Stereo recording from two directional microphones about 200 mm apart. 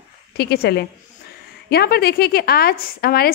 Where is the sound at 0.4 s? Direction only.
55° left (ahead or behind).